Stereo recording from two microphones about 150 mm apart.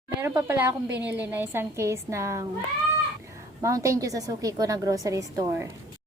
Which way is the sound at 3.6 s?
20° right (ahead or behind).